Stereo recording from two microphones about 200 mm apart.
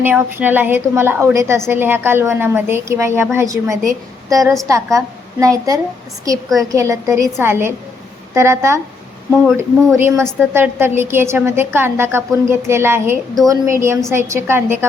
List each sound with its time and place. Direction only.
0.0 s a woman's voice: 10° right (ahead or behind)